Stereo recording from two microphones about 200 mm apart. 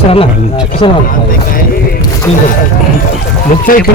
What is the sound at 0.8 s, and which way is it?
Speech, 25° left (ahead or behind).